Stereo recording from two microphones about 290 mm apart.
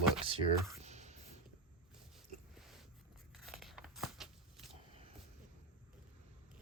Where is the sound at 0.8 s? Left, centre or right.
Right.